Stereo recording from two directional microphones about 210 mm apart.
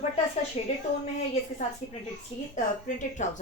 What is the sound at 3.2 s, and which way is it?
Speech, 35° left (ahead or behind).